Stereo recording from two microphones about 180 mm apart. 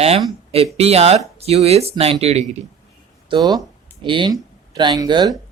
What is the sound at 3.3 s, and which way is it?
Speech, 20° right (ahead or behind).